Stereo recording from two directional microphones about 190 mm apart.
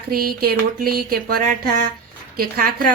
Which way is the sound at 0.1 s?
50° right (ahead or behind).